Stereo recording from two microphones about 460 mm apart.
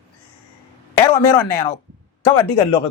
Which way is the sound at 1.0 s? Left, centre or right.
Left.